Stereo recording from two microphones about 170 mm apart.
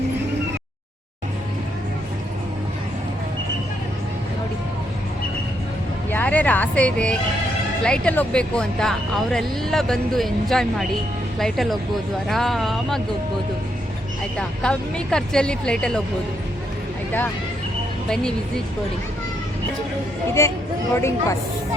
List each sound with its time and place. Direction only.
6.1 s speech: 10° left (ahead or behind)
14.3 s speech: 5° left (ahead or behind)
18.1 s speech: 5° left (ahead or behind)
20.4 s speech: 15° left (ahead or behind)